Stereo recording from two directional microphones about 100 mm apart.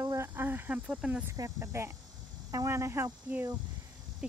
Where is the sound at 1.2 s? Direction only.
30° right (ahead or behind).